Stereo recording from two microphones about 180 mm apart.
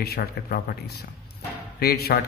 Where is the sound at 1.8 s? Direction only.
60° left (ahead or behind).